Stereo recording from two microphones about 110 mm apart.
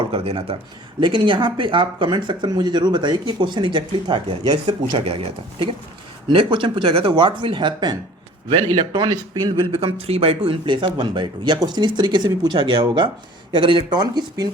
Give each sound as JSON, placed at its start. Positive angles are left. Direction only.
{"t": 0.0, "sound": "speech", "side_deg": -60}
{"t": 0.9, "sound": "speech", "side_deg": -45}
{"t": 5.0, "sound": "speech", "side_deg": -65}
{"t": 6.3, "sound": "speech", "side_deg": -50}
{"t": 9.7, "sound": "speech", "side_deg": -60}